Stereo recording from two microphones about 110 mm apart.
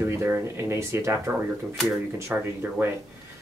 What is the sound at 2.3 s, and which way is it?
Speech, 15° right (ahead or behind).